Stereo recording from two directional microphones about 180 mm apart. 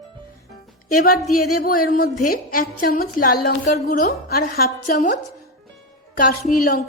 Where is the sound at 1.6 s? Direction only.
50° left (ahead or behind).